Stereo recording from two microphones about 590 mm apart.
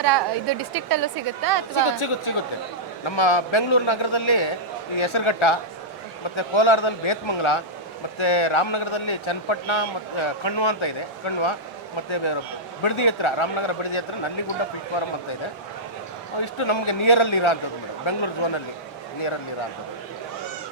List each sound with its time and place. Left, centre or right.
0.0 s a woman's voice: right
1.7 s a man's voice: left
12.1 s a man's voice: left
16.4 s a man's voice: left